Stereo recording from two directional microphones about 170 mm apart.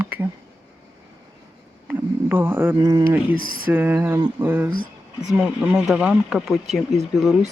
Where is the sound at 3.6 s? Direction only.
10° right (ahead or behind).